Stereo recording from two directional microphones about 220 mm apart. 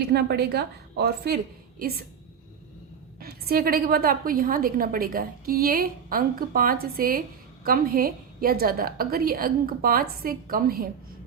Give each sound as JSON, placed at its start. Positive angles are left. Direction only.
{"t": 0.0, "sound": "a woman's voice", "side_deg": -50}
{"t": 3.2, "sound": "a woman's voice", "side_deg": -45}